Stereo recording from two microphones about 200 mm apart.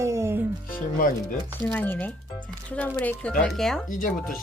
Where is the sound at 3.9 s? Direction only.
40° left (ahead or behind).